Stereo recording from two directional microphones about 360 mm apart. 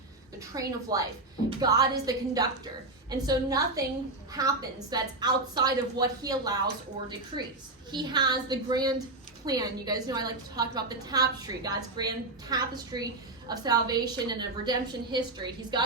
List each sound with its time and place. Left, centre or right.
0.3 s a woman's voice: centre
7.9 s a woman's voice: centre